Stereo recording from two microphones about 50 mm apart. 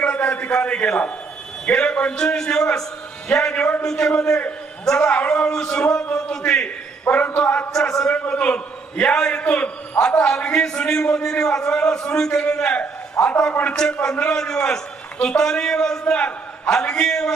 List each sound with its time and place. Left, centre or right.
0.0 s a sound: left
0.6 s a man's voice: left
3.5 s a man's voice: left
3.8 s a man's voice: centre
7.1 s a man's voice: left
7.7 s a man's voice: centre
8.3 s a man's voice: left
10.2 s a man's voice: centre
13.5 s a man's voice: left
14.0 s a man's voice: centre